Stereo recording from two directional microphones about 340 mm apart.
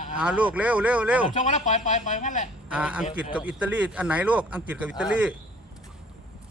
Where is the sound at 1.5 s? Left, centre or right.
Left.